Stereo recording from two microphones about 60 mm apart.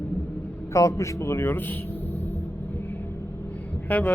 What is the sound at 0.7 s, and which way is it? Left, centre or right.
Speech, left.